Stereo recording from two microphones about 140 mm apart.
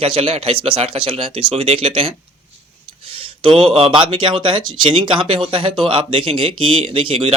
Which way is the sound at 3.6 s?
40° right (ahead or behind).